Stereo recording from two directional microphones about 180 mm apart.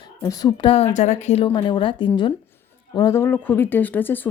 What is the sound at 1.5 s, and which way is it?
A woman's voice, 25° left (ahead or behind).